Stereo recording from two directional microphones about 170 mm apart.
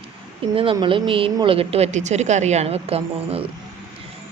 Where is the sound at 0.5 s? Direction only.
30° right (ahead or behind).